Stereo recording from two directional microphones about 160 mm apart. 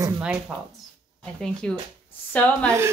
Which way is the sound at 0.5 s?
Centre (ahead or behind).